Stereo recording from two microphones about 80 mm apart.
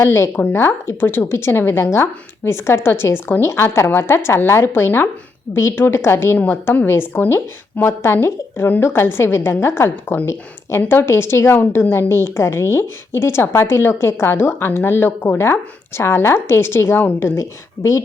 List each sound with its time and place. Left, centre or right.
0.0 s a woman's voice: left
6.3 s a woman's voice: left